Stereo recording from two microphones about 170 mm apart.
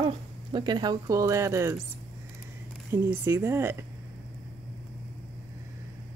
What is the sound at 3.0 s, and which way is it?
Speech, 15° right (ahead or behind).